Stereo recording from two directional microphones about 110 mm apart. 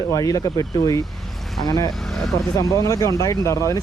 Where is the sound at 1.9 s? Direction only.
5° left (ahead or behind).